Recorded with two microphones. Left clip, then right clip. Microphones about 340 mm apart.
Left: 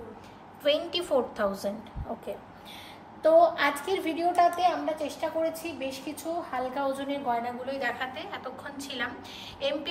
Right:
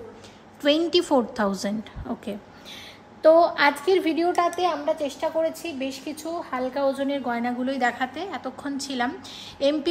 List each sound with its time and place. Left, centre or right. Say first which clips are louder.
0.7 s a woman's voice: right 6 dB; centre
3.2 s a woman's voice: right 4 dB; right